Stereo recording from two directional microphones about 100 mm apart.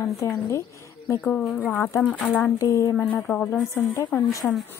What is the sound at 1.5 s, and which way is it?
A woman's voice, 20° left (ahead or behind).